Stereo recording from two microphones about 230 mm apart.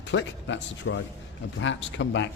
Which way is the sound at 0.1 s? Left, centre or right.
Left.